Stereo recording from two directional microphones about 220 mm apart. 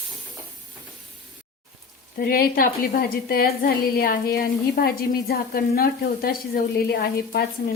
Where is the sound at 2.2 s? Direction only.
40° left (ahead or behind).